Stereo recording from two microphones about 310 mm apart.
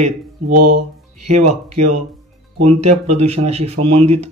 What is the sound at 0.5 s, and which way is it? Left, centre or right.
Speech, right.